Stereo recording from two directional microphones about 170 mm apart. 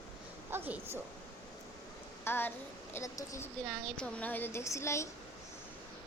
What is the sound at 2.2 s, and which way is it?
Speech, 15° left (ahead or behind).